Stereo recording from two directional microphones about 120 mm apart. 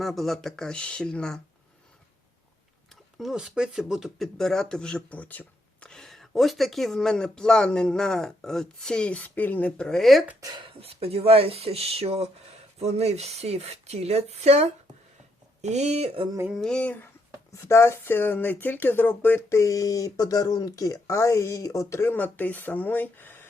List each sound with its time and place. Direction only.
0.0 s speech: centre (ahead or behind)
2.9 s speech: centre (ahead or behind)
5.9 s speech: 5° left (ahead or behind)
10.6 s speech: 50° right (ahead or behind)
16.5 s a sound: 5° left (ahead or behind)
17.5 s speech: 25° left (ahead or behind)